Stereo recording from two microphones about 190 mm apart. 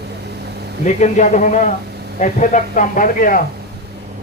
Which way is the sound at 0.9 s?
40° left (ahead or behind).